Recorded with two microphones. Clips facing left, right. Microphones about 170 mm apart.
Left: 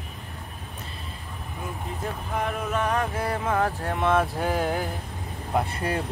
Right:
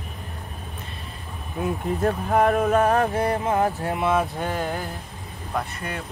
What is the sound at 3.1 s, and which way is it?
Speech, 25° right (ahead or behind).